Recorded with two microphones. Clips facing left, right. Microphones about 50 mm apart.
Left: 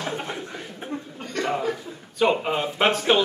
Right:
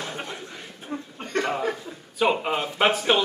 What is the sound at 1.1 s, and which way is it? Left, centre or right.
Chuckle, right.